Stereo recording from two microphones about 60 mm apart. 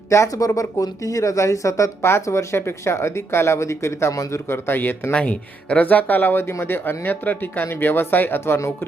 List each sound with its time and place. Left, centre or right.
0.3 s speech: left
2.0 s speech: left
5.1 s speech: left